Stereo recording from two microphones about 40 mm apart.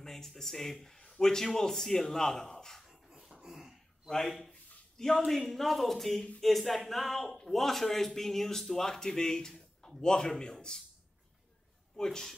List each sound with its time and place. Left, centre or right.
0.0 s speech: centre
0.9 s speech: left
2.9 s a sound: centre
4.5 s a sound: centre
5.3 s speech: centre
10.0 s speech: centre
12.0 s speech: centre